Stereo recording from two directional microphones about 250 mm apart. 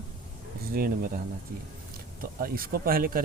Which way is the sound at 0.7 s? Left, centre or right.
Right.